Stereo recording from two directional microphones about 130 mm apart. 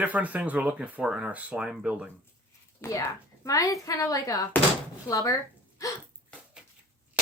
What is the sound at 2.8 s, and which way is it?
A woman's voice, 20° left (ahead or behind).